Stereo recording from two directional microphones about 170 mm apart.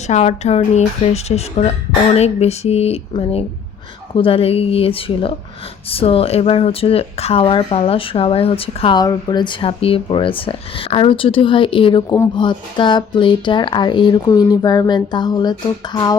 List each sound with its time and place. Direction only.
0.1 s speech: 40° left (ahead or behind); by 16.1 s 25° left (ahead or behind)